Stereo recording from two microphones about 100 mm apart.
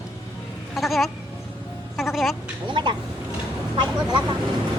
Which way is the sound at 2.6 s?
55° right (ahead or behind).